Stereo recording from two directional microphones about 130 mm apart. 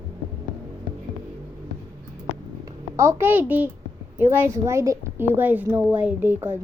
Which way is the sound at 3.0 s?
20° right (ahead or behind).